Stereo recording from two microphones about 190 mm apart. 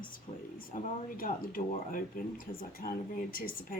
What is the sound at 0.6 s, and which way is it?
Speech, 45° left (ahead or behind).